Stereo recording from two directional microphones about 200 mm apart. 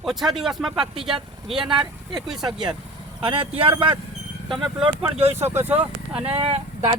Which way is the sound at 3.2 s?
25° right (ahead or behind).